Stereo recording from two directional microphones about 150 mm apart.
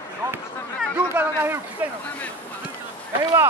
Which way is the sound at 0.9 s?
15° right (ahead or behind).